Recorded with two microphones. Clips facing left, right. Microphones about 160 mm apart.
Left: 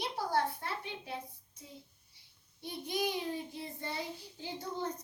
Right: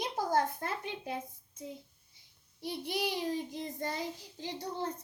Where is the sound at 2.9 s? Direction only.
35° right (ahead or behind).